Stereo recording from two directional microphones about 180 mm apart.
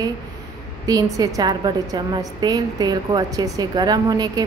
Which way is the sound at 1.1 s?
20° right (ahead or behind).